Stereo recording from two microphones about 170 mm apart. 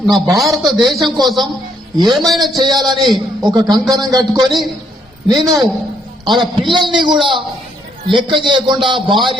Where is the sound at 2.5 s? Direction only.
25° right (ahead or behind).